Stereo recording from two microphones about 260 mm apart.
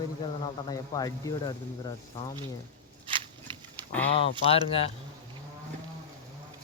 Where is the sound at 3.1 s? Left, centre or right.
Centre.